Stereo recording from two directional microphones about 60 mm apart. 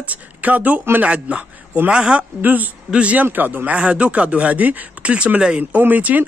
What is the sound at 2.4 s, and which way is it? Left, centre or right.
Speech, right.